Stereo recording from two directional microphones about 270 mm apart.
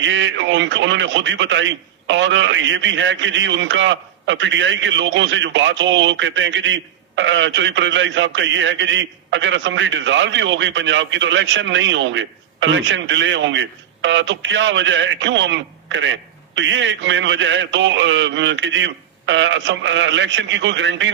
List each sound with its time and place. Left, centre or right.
0.0 s a man's voice: right